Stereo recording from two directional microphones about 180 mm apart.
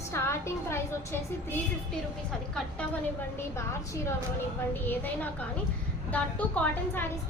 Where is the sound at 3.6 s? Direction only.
15° left (ahead or behind).